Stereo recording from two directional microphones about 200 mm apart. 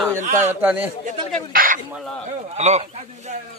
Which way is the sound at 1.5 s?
45° right (ahead or behind).